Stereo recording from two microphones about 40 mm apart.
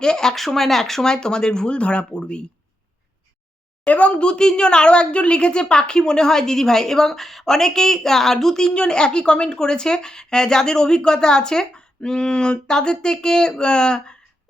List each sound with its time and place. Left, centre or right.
0.0 s speech: centre
3.8 s a woman's voice: left; by 14.2 s centre